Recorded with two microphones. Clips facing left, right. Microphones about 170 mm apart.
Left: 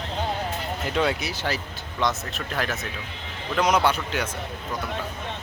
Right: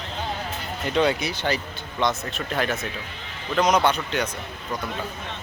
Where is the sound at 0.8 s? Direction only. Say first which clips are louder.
Right 4 dB; 5° left (ahead or behind).